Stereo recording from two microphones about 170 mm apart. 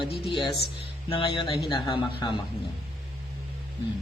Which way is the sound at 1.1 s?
30° left (ahead or behind).